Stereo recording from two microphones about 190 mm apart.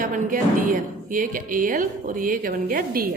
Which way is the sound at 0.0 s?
45° right (ahead or behind).